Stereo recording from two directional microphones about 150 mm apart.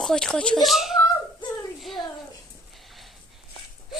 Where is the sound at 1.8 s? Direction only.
Centre (ahead or behind).